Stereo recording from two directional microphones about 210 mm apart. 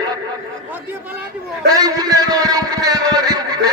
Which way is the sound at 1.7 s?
15° right (ahead or behind).